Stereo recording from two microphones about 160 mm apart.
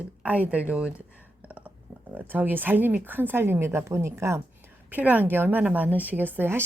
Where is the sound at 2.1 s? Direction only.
10° right (ahead or behind).